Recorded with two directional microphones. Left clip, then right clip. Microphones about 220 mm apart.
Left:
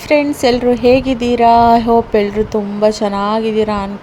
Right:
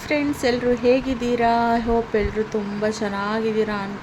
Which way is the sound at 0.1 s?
25° left (ahead or behind).